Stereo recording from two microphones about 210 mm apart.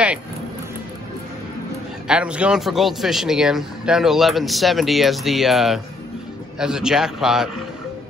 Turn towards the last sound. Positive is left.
turn(degrees=0)  # may be behind; listen again after turning